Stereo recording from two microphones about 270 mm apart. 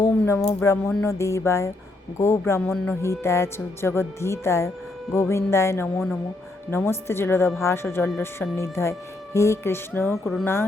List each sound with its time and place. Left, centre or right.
0.6 s speech: centre